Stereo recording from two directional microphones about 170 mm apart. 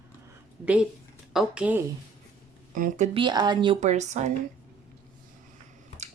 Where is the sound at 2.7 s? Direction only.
55° right (ahead or behind).